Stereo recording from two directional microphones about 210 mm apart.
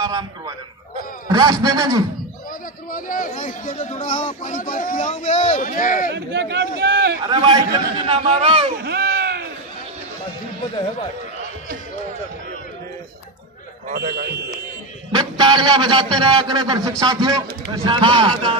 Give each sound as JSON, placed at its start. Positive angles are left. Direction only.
{"t": 0.0, "sound": "a sound", "side_deg": -20}
{"t": 1.3, "sound": "a man's voice", "side_deg": -20}
{"t": 2.9, "sound": "speech", "side_deg": 40}
{"t": 6.1, "sound": "speech", "side_deg": -55}
{"t": 7.2, "sound": "a man's voice", "side_deg": -20}
{"t": 8.7, "sound": "baby cry", "side_deg": -50}
{"t": 13.8, "sound": "a man's voice", "side_deg": -50}
{"t": 15.1, "sound": "a man's voice", "side_deg": -20}